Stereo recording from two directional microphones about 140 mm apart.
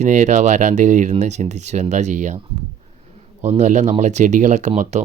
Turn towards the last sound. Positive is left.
turn(degrees=-55)  # may be behind; listen again after turning